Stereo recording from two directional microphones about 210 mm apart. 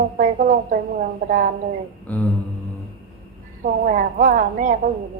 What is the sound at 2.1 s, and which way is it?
Speech, 10° left (ahead or behind).